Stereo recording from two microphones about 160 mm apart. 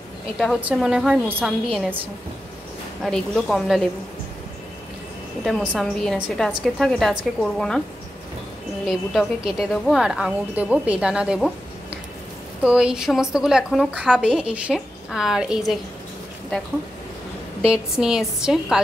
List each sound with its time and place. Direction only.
0.4 s a woman's voice: 5° right (ahead or behind)
3.0 s a woman's voice: centre (ahead or behind)
5.4 s a woman's voice: 5° right (ahead or behind)
8.8 s a woman's voice: centre (ahead or behind)
12.6 s a woman's voice: 5° right (ahead or behind)
17.6 s a woman's voice: 5° right (ahead or behind)